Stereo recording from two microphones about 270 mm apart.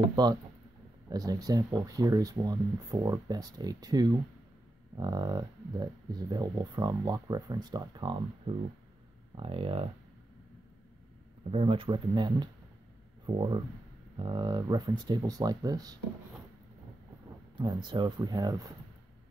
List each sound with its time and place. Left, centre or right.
0.1 s speech: centre
11.5 s speech: centre
14.1 s speech: centre
17.6 s speech: centre